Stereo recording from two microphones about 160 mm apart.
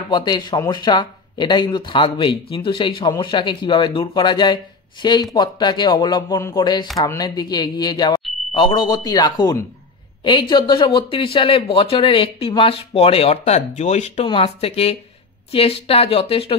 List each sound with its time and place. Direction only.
0.1 s speech: 25° left (ahead or behind)